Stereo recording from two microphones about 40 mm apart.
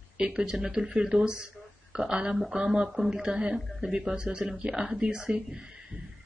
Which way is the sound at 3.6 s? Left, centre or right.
Centre.